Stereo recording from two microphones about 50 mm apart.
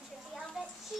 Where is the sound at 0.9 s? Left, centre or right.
Centre.